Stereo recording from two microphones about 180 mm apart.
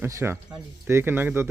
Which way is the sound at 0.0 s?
15° right (ahead or behind).